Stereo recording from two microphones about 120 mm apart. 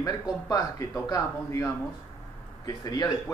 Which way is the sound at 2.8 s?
35° left (ahead or behind).